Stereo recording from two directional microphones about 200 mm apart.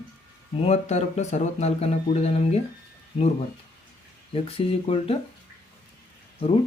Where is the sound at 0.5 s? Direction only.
30° left (ahead or behind).